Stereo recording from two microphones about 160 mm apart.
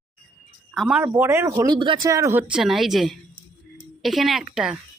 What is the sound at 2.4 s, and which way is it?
A woman's voice, 5° right (ahead or behind).